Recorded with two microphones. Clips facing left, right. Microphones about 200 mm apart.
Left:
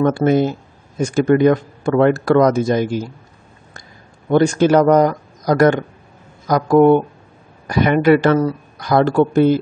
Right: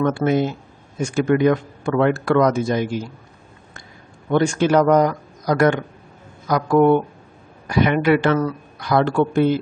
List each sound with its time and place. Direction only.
0.0 s a man's voice: 40° left (ahead or behind)
4.3 s a man's voice: 40° left (ahead or behind)